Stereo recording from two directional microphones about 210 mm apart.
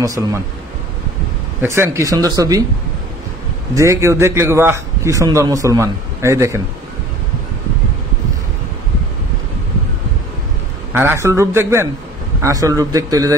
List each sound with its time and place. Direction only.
0.0 s a man's voice: 15° right (ahead or behind)
1.6 s a man's voice: 10° right (ahead or behind)
3.7 s a man's voice: 15° right (ahead or behind)
10.9 s a man's voice: 10° right (ahead or behind)